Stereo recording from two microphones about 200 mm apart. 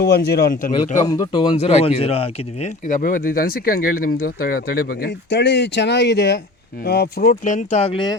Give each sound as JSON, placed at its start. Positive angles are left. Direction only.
{"t": 0.0, "sound": "speech", "side_deg": 50}
{"t": 0.9, "sound": "speech", "side_deg": 15}